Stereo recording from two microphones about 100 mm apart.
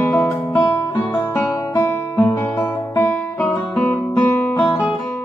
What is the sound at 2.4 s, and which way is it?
Music, 20° left (ahead or behind).